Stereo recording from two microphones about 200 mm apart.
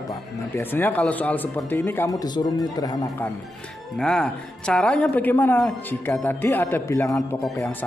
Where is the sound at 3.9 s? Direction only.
5° left (ahead or behind).